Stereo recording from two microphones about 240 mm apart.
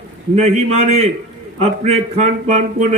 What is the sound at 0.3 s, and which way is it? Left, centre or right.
A man's voice, right.